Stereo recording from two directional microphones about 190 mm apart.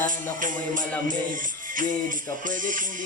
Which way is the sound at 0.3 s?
45° right (ahead or behind).